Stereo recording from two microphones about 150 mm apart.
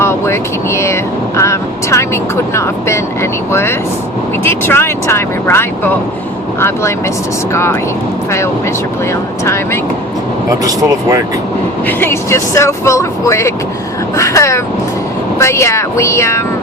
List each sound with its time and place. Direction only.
0.0 s speech: 15° left (ahead or behind)
10.6 s speech: 25° right (ahead or behind)
11.9 s speech: 15° left (ahead or behind)